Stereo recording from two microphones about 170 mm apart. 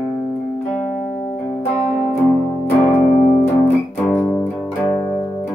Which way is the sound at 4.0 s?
10° left (ahead or behind).